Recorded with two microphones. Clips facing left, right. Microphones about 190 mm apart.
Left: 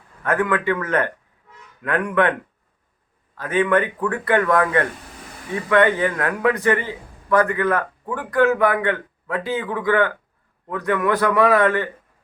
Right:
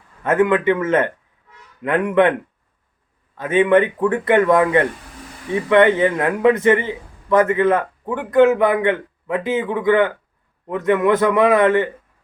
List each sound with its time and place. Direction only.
0.2 s a man's voice: 20° right (ahead or behind)
3.3 s a man's voice: 20° right (ahead or behind)